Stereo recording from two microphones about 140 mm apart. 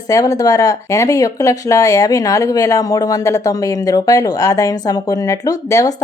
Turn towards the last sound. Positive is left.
turn(degrees=25)  # may be behind; listen again after turning